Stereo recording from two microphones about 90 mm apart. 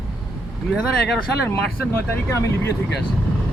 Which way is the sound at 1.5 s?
30° left (ahead or behind).